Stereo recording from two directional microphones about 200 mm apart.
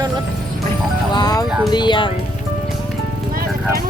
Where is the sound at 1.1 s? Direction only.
20° left (ahead or behind).